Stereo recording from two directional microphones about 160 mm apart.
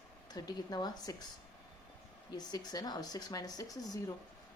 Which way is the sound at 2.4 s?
25° left (ahead or behind).